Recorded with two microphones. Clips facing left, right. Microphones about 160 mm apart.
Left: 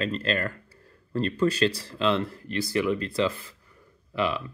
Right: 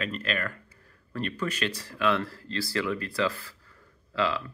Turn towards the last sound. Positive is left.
turn(degrees=20)  # may be behind; listen again after turning